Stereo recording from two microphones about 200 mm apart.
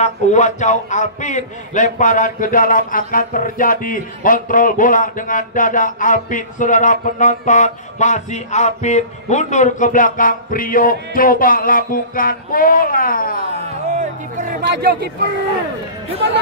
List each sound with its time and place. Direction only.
0.0 s a man's voice: 35° left (ahead or behind)
14.5 s speech: 50° right (ahead or behind)